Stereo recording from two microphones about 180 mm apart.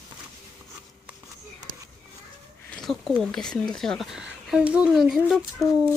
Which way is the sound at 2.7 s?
Centre (ahead or behind).